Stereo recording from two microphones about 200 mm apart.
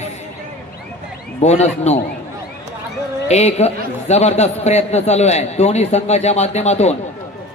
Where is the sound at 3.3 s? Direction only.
35° left (ahead or behind).